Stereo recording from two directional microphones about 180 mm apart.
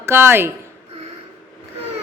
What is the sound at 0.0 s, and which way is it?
Speech, 15° right (ahead or behind).